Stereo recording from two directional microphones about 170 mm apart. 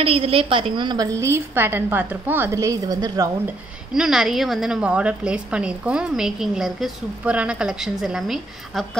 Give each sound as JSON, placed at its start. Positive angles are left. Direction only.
{"t": 0.0, "sound": "a woman's voice", "side_deg": -35}
{"t": 1.2, "sound": "a woman's voice", "side_deg": -15}
{"t": 3.4, "sound": "a woman's voice", "side_deg": -5}